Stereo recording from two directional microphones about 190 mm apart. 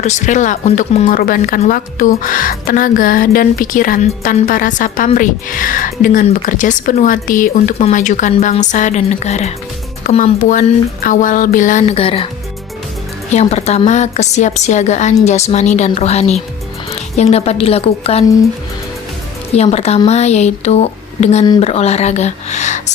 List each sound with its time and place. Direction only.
0.0 s speech: 40° left (ahead or behind)
13.3 s speech: 35° left (ahead or behind)
19.5 s speech: 35° left (ahead or behind)